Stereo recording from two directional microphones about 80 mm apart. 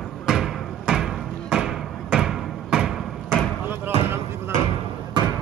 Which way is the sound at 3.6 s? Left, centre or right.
Right.